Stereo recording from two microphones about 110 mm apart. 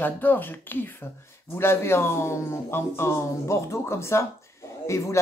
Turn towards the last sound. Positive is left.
turn(degrees=25)  # may be behind; listen again after turning